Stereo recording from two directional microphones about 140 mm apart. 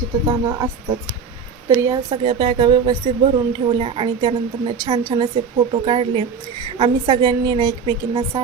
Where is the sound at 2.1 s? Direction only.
35° right (ahead or behind).